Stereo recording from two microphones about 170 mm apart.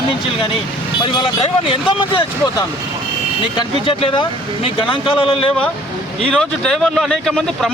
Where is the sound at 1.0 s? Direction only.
25° left (ahead or behind).